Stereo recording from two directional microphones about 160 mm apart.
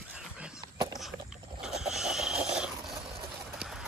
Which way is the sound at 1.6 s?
5° right (ahead or behind).